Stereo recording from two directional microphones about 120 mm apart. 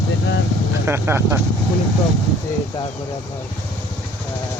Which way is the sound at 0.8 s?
20° right (ahead or behind).